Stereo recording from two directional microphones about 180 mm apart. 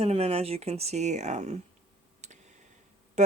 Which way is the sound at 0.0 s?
35° right (ahead or behind).